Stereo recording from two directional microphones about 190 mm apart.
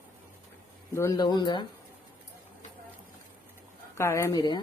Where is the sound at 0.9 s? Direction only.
15° left (ahead or behind).